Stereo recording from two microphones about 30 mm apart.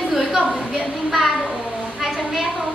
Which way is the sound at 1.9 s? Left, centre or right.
Centre.